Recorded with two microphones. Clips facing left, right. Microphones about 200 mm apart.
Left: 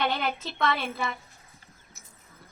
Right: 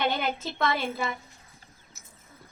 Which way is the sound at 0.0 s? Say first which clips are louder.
Right 1 dB; 20° right (ahead or behind).